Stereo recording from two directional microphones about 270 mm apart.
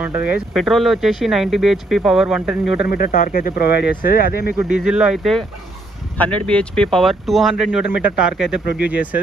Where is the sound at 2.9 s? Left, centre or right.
Left.